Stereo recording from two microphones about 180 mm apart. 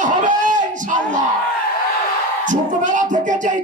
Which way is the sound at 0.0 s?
45° right (ahead or behind).